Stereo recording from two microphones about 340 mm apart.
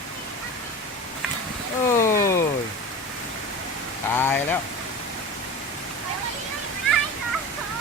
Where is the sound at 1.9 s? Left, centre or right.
Centre.